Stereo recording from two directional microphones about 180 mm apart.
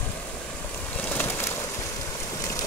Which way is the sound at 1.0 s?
10° left (ahead or behind).